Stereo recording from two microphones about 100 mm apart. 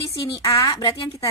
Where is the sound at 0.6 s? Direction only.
35° left (ahead or behind).